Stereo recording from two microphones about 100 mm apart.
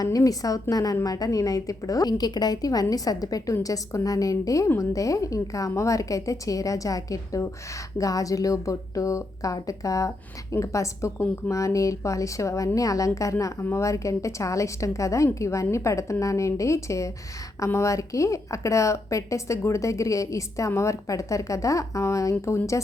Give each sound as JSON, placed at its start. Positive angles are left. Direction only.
{"t": 0.0, "sound": "a woman's voice", "side_deg": 35}